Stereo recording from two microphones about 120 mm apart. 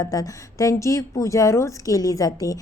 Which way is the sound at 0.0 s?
30° left (ahead or behind).